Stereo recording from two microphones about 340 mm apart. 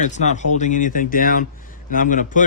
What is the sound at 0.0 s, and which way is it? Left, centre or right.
Speech, left.